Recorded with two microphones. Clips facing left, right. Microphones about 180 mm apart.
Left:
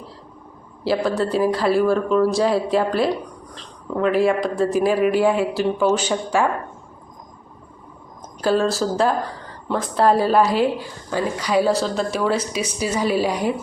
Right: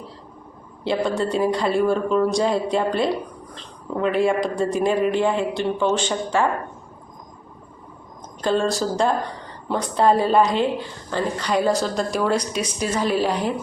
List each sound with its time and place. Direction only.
0.9 s speech: 5° left (ahead or behind)
8.4 s speech: 5° left (ahead or behind)